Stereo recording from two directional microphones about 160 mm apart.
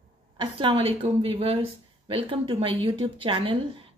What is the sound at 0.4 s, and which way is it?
Speech, 35° right (ahead or behind).